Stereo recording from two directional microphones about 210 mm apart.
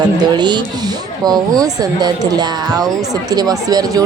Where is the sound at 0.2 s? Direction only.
20° right (ahead or behind).